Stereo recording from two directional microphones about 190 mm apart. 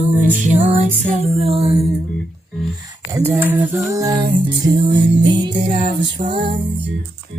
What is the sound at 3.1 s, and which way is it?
Music, 15° right (ahead or behind).